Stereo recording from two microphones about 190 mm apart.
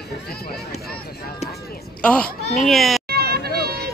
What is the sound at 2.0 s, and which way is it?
Speech, 5° left (ahead or behind).